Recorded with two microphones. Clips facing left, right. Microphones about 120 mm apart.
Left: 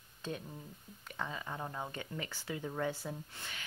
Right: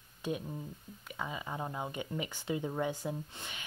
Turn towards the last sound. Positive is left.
turn(degrees=-20)  # may be behind; listen again after turning